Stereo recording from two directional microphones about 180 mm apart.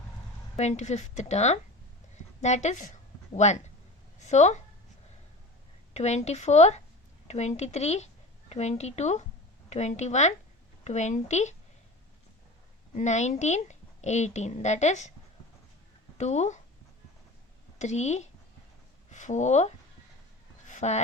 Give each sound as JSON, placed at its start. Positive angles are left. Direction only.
{"t": 0.5, "sound": "a woman's voice", "side_deg": 40}
{"t": 2.1, "sound": "a sound", "side_deg": 40}
{"t": 4.2, "sound": "a woman's voice", "side_deg": 40}
{"t": 5.9, "sound": "a woman's voice", "side_deg": 40}
{"t": 12.9, "sound": "a woman's voice", "side_deg": 40}
{"t": 16.1, "sound": "a woman's voice", "side_deg": 40}
{"t": 17.7, "sound": "a woman's voice", "side_deg": 40}
{"t": 20.7, "sound": "a sound", "side_deg": 40}